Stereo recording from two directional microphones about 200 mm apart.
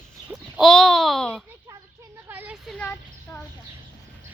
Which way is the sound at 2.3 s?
5° right (ahead or behind).